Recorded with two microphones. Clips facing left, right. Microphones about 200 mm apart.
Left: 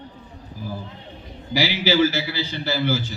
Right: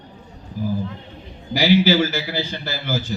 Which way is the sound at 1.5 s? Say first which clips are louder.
Right 6 dB; 50° right (ahead or behind).